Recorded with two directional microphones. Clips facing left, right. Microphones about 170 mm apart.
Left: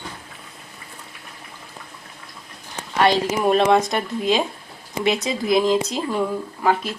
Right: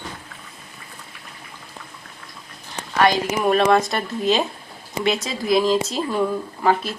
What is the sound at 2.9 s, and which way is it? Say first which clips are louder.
Speech: even; 20° left (ahead or behind).